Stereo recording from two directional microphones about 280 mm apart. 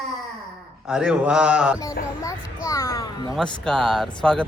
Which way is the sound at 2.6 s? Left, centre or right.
Centre.